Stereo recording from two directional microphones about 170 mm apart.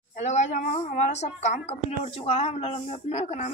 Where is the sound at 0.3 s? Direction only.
45° left (ahead or behind).